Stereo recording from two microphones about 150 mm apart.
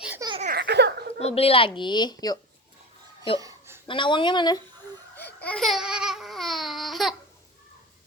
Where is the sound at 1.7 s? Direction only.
30° left (ahead or behind).